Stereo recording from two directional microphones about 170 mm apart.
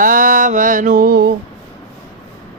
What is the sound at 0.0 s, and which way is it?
Mantra, 55° right (ahead or behind).